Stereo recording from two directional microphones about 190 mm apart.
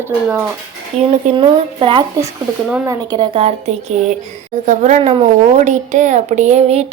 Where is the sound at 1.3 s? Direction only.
25° right (ahead or behind).